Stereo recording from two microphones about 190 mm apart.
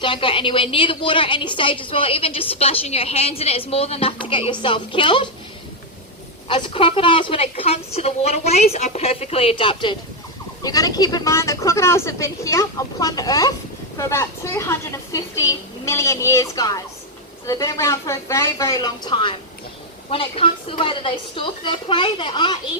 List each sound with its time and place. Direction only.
0.0 s a woman's voice: 25° left (ahead or behind)
6.5 s a woman's voice: 25° left (ahead or behind)